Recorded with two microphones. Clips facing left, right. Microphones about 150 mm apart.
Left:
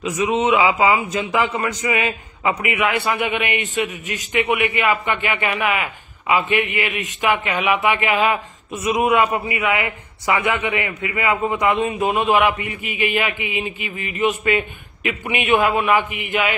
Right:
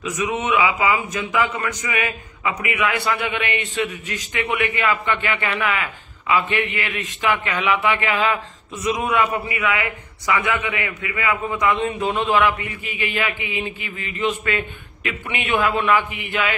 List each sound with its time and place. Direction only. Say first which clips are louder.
0.0 s a man's voice: left 5 dB; 25° left (ahead or behind)